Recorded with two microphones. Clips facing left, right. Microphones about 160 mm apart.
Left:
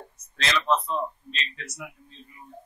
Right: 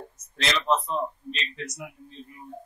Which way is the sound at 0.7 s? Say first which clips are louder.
Even; 15° right (ahead or behind).